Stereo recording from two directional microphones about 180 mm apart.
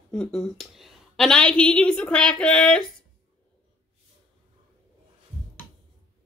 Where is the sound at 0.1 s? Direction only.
5° left (ahead or behind).